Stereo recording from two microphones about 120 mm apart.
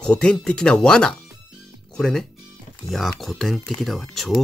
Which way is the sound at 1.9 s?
5° left (ahead or behind).